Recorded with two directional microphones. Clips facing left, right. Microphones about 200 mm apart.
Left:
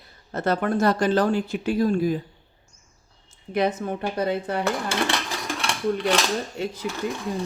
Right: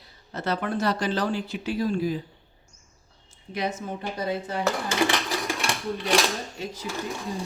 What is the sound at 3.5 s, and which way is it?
Speech, 55° left (ahead or behind).